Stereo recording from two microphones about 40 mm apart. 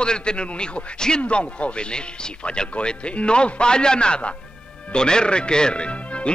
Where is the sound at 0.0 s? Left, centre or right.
Left.